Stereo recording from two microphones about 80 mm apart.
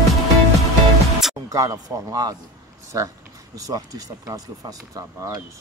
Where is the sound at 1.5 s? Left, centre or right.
Right.